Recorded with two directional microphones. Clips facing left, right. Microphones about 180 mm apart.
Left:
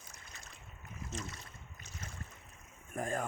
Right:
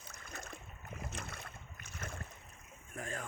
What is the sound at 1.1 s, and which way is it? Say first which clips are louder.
Boat: left 2 dB; 55° right (ahead or behind).